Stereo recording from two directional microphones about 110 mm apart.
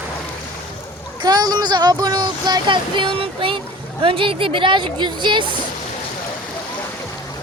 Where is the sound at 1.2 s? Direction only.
40° right (ahead or behind).